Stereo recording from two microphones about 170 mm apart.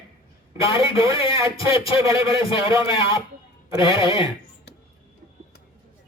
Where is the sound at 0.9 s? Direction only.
20° right (ahead or behind).